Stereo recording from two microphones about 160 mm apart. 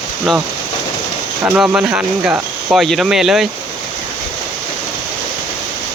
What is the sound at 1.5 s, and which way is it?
Speech, 5° right (ahead or behind).